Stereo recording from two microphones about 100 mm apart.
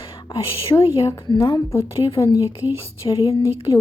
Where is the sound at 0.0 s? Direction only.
55° left (ahead or behind).